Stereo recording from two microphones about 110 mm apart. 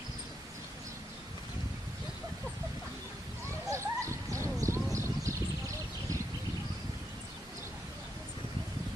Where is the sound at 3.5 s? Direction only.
25° right (ahead or behind).